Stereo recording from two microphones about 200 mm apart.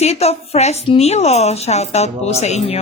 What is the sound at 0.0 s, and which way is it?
A woman's voice, 30° left (ahead or behind).